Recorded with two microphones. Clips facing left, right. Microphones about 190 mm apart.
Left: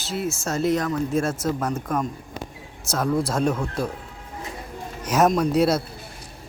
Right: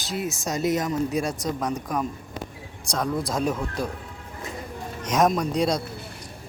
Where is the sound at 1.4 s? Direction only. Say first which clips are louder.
Left 2 dB; 5° left (ahead or behind).